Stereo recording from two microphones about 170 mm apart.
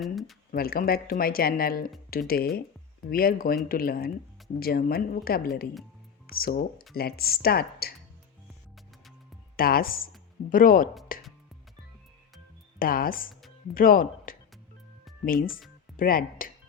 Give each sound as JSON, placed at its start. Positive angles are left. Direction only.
{"t": 0.0, "sound": "speech", "side_deg": 0}
{"t": 0.5, "sound": "speech", "side_deg": 60}
{"t": 9.6, "sound": "speech", "side_deg": 60}
{"t": 11.1, "sound": "music", "side_deg": 55}
{"t": 12.8, "sound": "speech", "side_deg": 60}